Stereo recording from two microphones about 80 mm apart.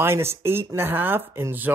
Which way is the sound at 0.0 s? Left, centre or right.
Right.